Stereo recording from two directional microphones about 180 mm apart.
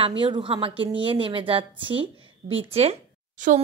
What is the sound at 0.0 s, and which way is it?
A woman's voice, 25° right (ahead or behind).